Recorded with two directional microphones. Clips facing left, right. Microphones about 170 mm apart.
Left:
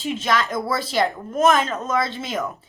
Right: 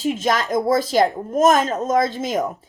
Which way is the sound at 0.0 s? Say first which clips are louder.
Right 2 dB; 45° right (ahead or behind).